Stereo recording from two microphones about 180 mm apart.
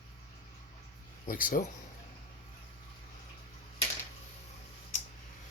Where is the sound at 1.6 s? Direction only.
50° left (ahead or behind).